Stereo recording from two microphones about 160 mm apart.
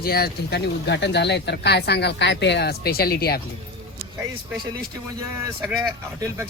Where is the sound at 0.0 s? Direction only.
75° left (ahead or behind).